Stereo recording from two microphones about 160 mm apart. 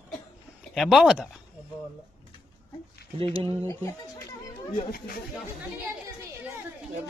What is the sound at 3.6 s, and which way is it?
Speech, 15° left (ahead or behind).